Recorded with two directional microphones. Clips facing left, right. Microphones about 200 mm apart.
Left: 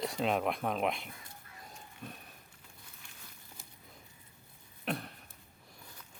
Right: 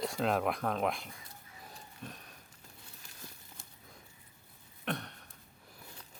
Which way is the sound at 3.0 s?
40° right (ahead or behind).